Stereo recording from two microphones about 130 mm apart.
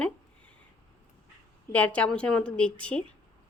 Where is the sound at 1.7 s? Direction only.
10° left (ahead or behind).